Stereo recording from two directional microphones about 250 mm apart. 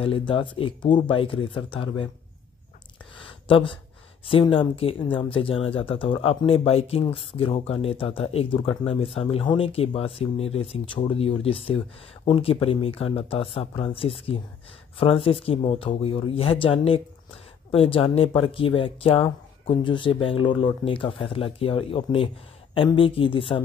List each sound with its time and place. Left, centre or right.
0.0 s speech: left
3.2 s a sound: left
4.3 s speech: left